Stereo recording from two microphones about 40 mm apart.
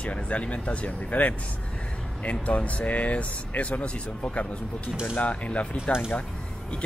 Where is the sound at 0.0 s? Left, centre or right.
Left.